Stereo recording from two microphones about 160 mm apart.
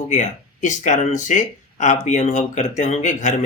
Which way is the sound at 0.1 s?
50° left (ahead or behind).